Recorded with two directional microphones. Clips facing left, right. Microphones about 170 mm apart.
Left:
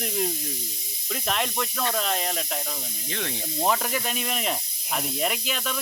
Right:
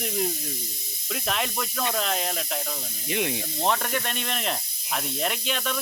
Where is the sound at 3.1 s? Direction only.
15° right (ahead or behind).